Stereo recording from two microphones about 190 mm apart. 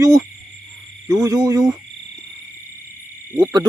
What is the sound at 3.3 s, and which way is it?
Owl, 20° right (ahead or behind).